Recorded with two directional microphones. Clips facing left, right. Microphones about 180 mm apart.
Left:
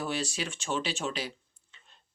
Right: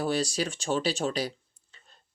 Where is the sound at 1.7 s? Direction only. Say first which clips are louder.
Right 2 dB; 40° right (ahead or behind).